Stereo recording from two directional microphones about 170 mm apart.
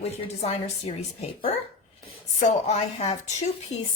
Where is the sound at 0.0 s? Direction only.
40° left (ahead or behind).